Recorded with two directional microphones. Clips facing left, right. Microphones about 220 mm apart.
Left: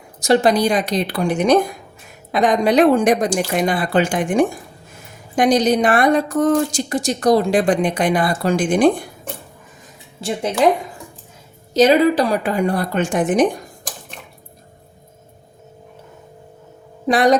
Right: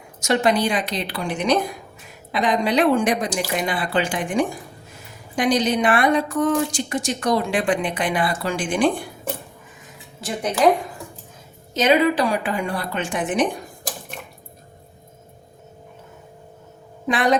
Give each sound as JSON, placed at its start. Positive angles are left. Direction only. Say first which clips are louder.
{"t": 0.2, "sound": "a woman's voice", "louder": "left 5 dB", "side_deg": 35}
{"t": 10.2, "sound": "speech", "louder": "left 4 dB", "side_deg": 25}
{"t": 11.7, "sound": "a woman's voice", "louder": "left 5 dB", "side_deg": 35}
{"t": 17.1, "sound": "a woman's voice", "louder": "left 6 dB", "side_deg": 40}